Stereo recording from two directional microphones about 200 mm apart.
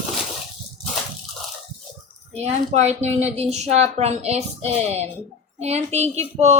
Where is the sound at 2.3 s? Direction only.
35° right (ahead or behind).